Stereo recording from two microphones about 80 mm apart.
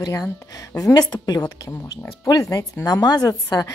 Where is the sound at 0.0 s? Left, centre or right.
Left.